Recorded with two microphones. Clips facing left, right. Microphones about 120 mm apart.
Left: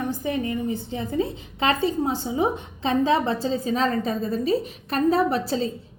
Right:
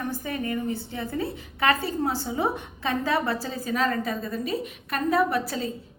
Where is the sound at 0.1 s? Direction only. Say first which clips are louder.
Left 3 dB; 20° left (ahead or behind).